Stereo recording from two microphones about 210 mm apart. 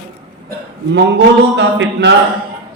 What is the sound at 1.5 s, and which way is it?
Speech, 55° right (ahead or behind).